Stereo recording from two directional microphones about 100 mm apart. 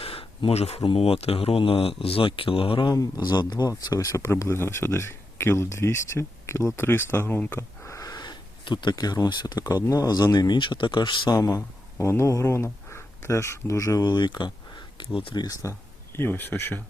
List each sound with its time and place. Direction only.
0.0 s speech: 70° left (ahead or behind)
2.9 s speech: 40° left (ahead or behind)
11.3 s speech: 30° left (ahead or behind)
14.1 s speech: 50° left (ahead or behind)
16.1 s speech: 20° left (ahead or behind)